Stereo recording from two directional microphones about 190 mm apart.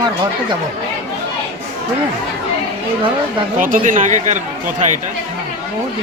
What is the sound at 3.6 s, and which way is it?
Speech, 45° right (ahead or behind).